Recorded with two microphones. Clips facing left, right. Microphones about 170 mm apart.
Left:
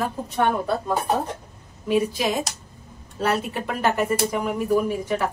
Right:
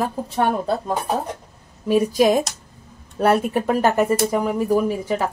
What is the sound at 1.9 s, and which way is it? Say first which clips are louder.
Speech: right 6 dB; 45° right (ahead or behind).